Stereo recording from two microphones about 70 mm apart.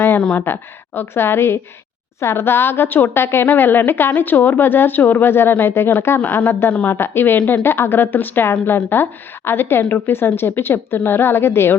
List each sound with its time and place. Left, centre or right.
0.3 s a woman's voice: left
6.1 s a woman's voice: left